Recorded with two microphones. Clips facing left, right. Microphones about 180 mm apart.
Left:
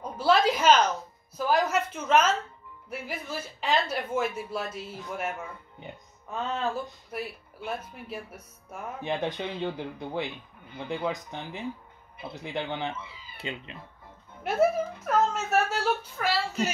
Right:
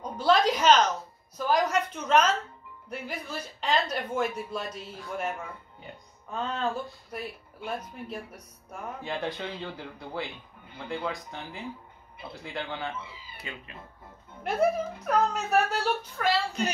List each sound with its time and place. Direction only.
0.0 s a woman's voice: 5° left (ahead or behind)
6.3 s speech: 5° left (ahead or behind)
9.0 s speech: 20° left (ahead or behind)
14.4 s a woman's voice: 5° left (ahead or behind)